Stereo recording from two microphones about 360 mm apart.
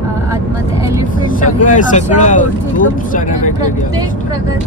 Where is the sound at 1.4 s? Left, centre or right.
Left.